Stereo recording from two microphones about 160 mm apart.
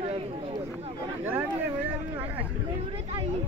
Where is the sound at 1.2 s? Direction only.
15° right (ahead or behind).